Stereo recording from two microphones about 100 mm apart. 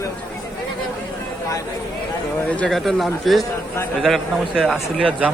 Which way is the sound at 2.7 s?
Centre (ahead or behind).